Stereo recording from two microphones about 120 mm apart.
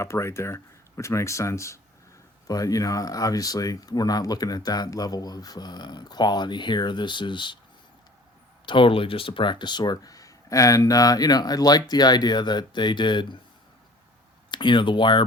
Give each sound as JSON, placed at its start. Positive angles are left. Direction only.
{"t": 0.0, "sound": "speech", "side_deg": 25}
{"t": 8.6, "sound": "speech", "side_deg": 45}
{"t": 14.5, "sound": "speech", "side_deg": 40}